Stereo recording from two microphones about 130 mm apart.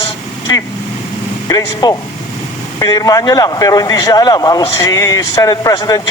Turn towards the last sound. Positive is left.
turn(degrees=30)  # may be behind; listen again after turning